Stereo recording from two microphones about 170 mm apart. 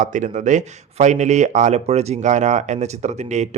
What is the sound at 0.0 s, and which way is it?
Speech, 45° right (ahead or behind).